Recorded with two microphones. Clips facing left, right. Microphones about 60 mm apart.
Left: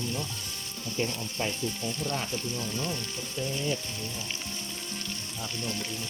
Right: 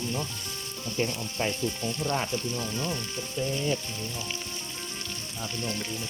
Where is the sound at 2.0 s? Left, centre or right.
Right.